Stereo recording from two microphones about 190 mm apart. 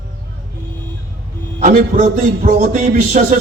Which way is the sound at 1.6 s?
40° right (ahead or behind).